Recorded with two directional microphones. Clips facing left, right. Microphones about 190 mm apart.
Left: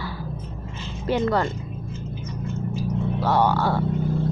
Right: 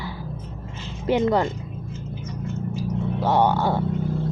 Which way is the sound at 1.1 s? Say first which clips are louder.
Right 2 dB; 15° right (ahead or behind).